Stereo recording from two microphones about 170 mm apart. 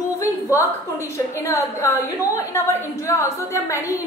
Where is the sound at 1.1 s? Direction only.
20° left (ahead or behind).